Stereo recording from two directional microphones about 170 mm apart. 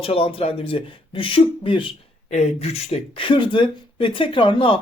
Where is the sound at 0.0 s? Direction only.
35° left (ahead or behind).